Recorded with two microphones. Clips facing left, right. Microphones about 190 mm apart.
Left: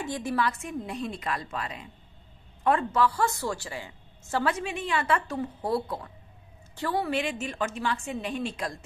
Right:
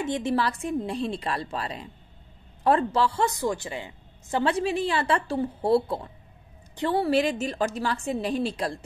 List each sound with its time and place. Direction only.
0.0 s a woman's voice: 25° right (ahead or behind)
4.6 s a woman's voice: 35° right (ahead or behind)
6.7 s a sound: 20° right (ahead or behind)
7.0 s a woman's voice: 35° right (ahead or behind)